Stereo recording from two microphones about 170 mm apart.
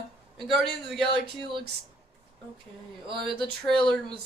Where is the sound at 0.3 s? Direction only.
Centre (ahead or behind).